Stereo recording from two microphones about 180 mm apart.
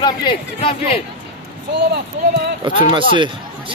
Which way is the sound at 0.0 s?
30° left (ahead or behind).